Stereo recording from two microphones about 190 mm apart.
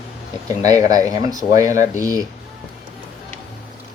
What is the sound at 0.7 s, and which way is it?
Speech, 20° right (ahead or behind).